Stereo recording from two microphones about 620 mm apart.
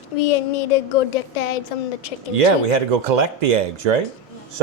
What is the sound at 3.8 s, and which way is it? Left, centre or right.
Speech, right.